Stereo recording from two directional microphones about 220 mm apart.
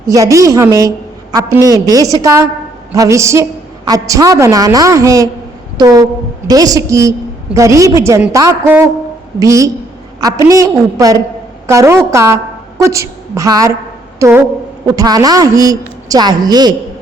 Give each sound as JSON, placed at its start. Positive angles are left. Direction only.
{"t": 0.1, "sound": "a woman's voice", "side_deg": -15}